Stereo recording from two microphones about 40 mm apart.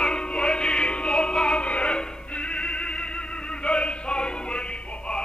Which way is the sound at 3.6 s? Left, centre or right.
Left.